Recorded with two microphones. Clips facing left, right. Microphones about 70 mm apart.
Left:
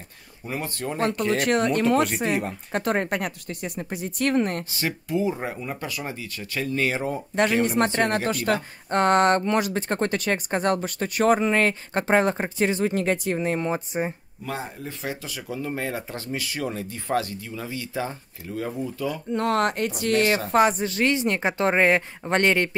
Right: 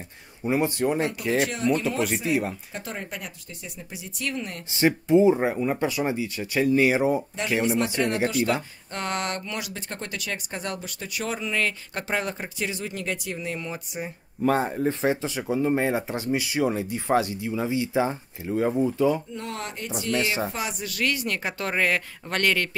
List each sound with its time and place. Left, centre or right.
0.5 s speech: centre
1.4 s speech: left
4.7 s speech: right
7.6 s speech: left
14.4 s speech: right
19.3 s speech: left
20.8 s speech: left